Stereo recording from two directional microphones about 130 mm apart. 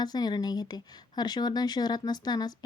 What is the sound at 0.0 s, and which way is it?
Speech, 30° left (ahead or behind).